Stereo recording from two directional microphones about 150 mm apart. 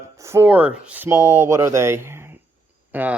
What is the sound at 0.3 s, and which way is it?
Speech, 15° right (ahead or behind).